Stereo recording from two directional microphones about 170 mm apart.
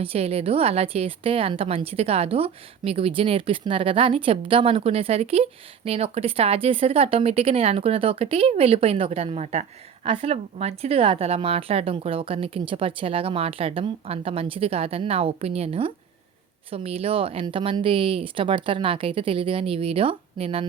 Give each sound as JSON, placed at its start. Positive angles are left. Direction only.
{"t": 0.0, "sound": "a woman's voice", "side_deg": -35}